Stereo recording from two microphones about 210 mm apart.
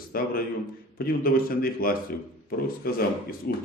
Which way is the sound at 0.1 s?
45° left (ahead or behind).